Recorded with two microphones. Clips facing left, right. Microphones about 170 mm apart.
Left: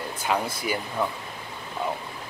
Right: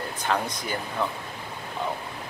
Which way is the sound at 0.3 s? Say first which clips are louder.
Left 2 dB; 10° left (ahead or behind).